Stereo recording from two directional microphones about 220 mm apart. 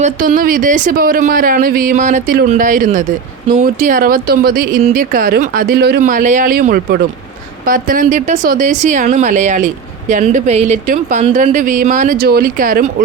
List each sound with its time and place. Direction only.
0.0 s speech: 40° right (ahead or behind)